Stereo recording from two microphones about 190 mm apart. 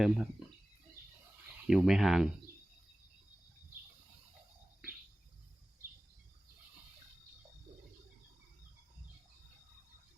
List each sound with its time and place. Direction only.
0.0 s speech: centre (ahead or behind)
1.6 s speech: centre (ahead or behind)